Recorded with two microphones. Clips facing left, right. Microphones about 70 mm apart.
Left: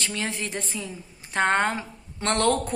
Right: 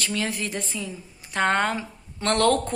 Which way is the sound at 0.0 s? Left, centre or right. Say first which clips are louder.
Right 2 dB; left.